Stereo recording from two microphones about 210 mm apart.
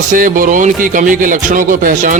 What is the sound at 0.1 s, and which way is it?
Speech, 40° right (ahead or behind).